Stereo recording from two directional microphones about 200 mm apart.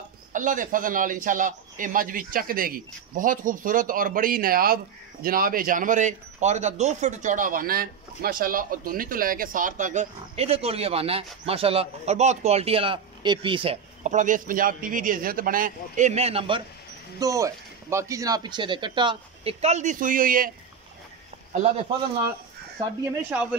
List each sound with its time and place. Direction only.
0.3 s a man's voice: 40° right (ahead or behind)
17.2 s speech: 15° right (ahead or behind); by 20.5 s 45° right (ahead or behind)
23.3 s speech: 5° right (ahead or behind)